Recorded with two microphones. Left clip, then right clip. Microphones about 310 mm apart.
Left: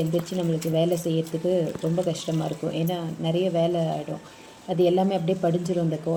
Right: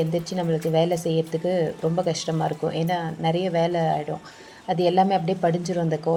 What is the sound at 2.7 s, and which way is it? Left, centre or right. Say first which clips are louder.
Speech: right 3 dB; right.